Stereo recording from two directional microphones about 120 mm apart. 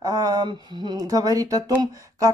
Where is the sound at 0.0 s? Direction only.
30° right (ahead or behind).